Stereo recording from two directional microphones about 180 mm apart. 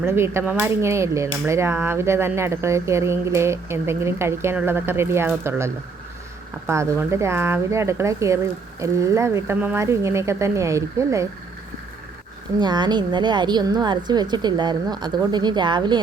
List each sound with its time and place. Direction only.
0.0 s speech: 15° right (ahead or behind)
12.5 s a woman's voice: 25° right (ahead or behind)